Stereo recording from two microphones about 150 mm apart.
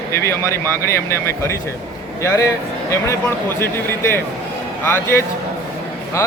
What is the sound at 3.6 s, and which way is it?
Speech, 15° left (ahead or behind).